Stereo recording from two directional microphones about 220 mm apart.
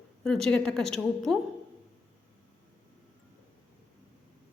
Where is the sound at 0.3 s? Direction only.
Centre (ahead or behind).